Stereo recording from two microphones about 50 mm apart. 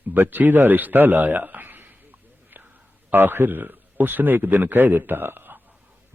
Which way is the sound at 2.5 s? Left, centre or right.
Right.